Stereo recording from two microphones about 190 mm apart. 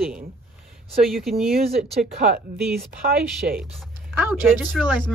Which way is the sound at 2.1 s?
40° right (ahead or behind).